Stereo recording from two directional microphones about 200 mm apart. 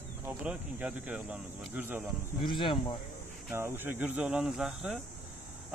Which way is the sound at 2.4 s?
25° left (ahead or behind).